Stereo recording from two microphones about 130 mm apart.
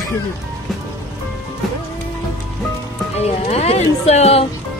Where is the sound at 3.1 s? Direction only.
55° left (ahead or behind).